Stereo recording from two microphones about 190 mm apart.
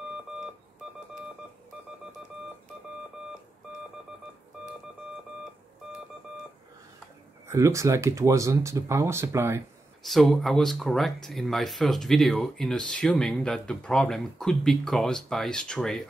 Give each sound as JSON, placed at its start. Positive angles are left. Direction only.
{"t": 7.4, "sound": "speech", "side_deg": -15}
{"t": 10.0, "sound": "speech", "side_deg": 0}